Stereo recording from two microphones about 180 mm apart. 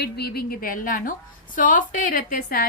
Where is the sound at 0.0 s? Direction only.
60° left (ahead or behind).